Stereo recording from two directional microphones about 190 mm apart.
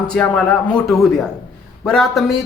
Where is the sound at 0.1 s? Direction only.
5° left (ahead or behind).